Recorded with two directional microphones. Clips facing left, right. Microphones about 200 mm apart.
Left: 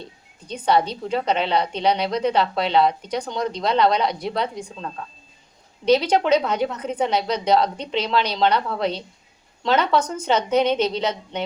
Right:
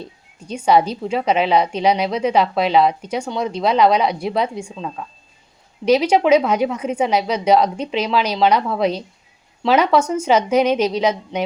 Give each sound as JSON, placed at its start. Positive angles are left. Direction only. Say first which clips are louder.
{"t": 0.4, "sound": "a woman's voice", "louder": "right 4 dB", "side_deg": -10}
{"t": 5.8, "sound": "a woman's voice", "louder": "right 3 dB", "side_deg": -10}